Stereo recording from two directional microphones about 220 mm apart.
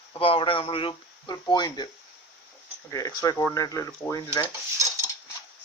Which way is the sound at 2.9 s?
15° left (ahead or behind).